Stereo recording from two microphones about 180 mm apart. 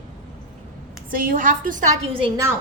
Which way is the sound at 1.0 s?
50° right (ahead or behind).